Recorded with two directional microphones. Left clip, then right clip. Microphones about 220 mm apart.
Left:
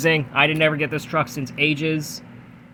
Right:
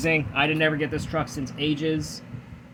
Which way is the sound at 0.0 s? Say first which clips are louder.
Left 5 dB; 35° left (ahead or behind).